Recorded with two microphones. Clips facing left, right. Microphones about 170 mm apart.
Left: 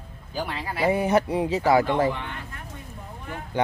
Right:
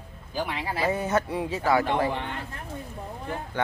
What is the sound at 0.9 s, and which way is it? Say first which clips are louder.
Speech: left 7 dB; 15° left (ahead or behind).